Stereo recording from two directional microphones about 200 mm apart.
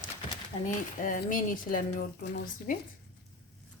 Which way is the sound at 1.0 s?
45° left (ahead or behind).